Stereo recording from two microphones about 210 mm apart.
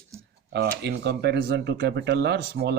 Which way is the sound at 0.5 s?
50° right (ahead or behind).